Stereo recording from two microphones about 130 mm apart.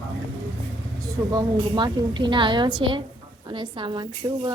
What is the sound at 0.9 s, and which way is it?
A woman's voice, 25° right (ahead or behind).